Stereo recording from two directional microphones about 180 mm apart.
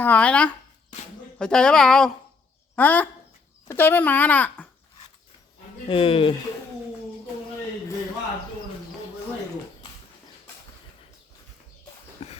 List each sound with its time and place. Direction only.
0.0 s speech: 10° left (ahead or behind)
5.9 s speech: 30° left (ahead or behind)
12.2 s a sound: 35° left (ahead or behind)